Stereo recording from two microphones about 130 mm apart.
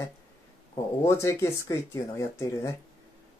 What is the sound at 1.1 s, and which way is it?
Speech, 20° left (ahead or behind).